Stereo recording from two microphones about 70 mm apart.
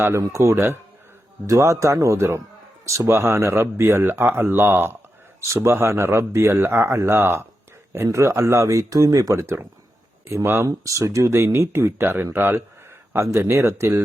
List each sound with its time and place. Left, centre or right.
0.0 s speech: right
8.6 s speech: right
9.3 s speech: right
10.7 s speech: right
11.3 s speech: right